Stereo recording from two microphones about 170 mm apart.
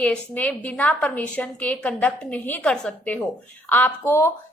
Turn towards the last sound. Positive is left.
turn(degrees=15)  # may be behind; listen again after turning